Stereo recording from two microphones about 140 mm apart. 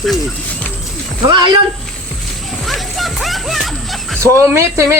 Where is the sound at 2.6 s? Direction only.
Centre (ahead or behind).